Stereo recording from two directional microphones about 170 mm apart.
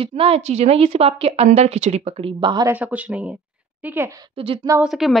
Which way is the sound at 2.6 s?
10° right (ahead or behind).